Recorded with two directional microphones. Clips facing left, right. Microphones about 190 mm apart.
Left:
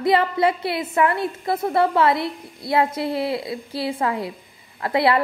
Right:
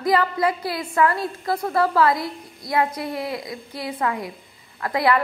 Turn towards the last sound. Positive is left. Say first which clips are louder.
# left 2 dB
turn(degrees=25)  # may be behind; listen again after turning